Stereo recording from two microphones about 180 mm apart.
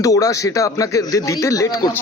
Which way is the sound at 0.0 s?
20° left (ahead or behind).